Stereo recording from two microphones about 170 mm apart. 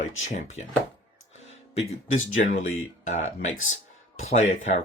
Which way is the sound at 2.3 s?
50° left (ahead or behind).